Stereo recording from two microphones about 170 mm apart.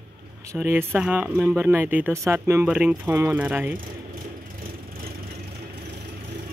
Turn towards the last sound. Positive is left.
turn(degrees=-60)  # may be behind; listen again after turning